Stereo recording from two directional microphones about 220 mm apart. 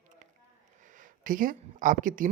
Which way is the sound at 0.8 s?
35° right (ahead or behind).